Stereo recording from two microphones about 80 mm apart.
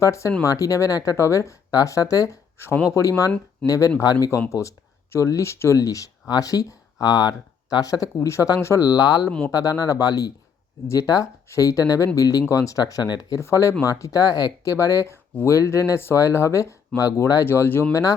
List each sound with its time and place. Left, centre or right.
0.0 s speech: left
4.4 s speech: left
12.8 s speech: left
13.4 s speech: left
17.0 s speech: left
17.4 s speech: left